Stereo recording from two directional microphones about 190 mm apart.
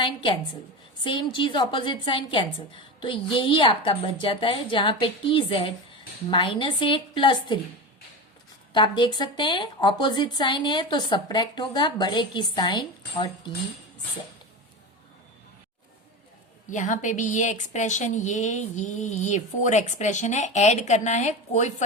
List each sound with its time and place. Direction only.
0.0 s a woman's voice: 25° left (ahead or behind)
8.7 s a woman's voice: 25° left (ahead or behind)
16.6 s a woman's voice: 40° left (ahead or behind)